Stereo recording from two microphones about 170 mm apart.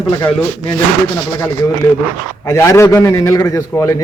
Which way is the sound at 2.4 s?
20° left (ahead or behind).